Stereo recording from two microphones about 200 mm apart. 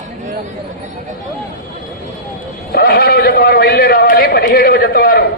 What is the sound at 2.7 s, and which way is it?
Sheep, 50° left (ahead or behind).